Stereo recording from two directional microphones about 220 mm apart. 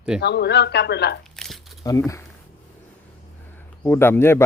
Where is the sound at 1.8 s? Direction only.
15° left (ahead or behind).